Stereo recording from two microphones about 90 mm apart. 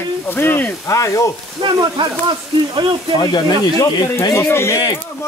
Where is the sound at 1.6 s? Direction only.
55° right (ahead or behind).